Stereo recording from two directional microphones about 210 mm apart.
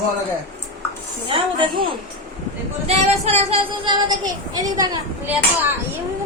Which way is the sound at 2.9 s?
30° right (ahead or behind).